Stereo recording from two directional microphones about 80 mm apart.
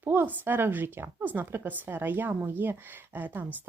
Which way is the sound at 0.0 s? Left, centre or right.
Right.